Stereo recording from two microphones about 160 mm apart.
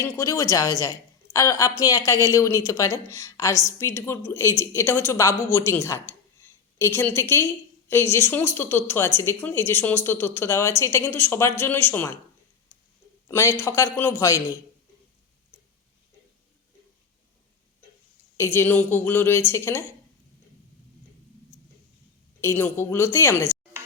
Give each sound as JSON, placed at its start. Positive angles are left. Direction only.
{"t": 0.0, "sound": "a woman's voice", "side_deg": 15}
{"t": 13.2, "sound": "a woman's voice", "side_deg": 20}
{"t": 18.3, "sound": "a woman's voice", "side_deg": 15}
{"t": 22.4, "sound": "a woman's voice", "side_deg": 15}